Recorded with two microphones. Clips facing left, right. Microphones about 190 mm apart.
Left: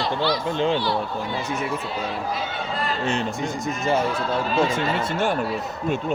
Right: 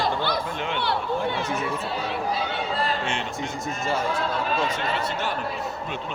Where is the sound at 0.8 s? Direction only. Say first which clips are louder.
Left 1 dB; 65° right (ahead or behind).